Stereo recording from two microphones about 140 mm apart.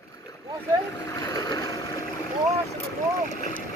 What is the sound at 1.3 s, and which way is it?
Boat, 30° left (ahead or behind).